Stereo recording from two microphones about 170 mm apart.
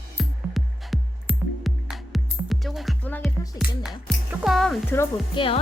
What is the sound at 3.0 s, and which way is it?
Music, 10° left (ahead or behind).